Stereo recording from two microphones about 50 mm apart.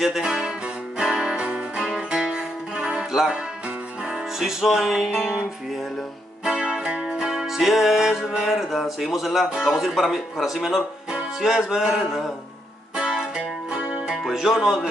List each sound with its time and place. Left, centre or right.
0.0 s music: centre
6.6 s music: centre
8.4 s speech: centre
11.1 s music: centre
11.5 s speech: centre
12.9 s music: centre